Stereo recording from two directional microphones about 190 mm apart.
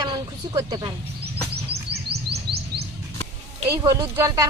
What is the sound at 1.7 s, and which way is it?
Music, 60° right (ahead or behind).